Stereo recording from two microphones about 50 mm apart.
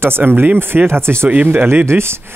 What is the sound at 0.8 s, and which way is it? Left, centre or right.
Speech, right.